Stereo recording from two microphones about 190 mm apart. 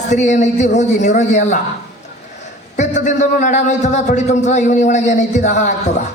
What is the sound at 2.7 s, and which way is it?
A man's voice, 40° left (ahead or behind).